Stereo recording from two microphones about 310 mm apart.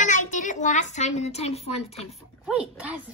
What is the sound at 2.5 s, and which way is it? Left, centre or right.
Speech, centre.